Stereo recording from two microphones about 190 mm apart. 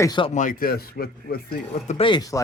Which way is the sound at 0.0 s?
20° left (ahead or behind).